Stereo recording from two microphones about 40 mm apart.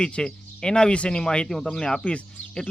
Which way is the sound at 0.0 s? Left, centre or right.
Centre.